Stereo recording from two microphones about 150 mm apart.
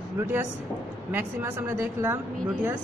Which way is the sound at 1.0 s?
15° right (ahead or behind).